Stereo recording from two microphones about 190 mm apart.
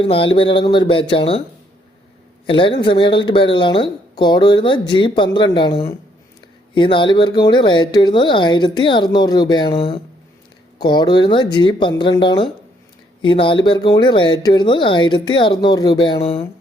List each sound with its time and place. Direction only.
0.0 s speech: 25° left (ahead or behind)
2.5 s speech: 25° left (ahead or behind)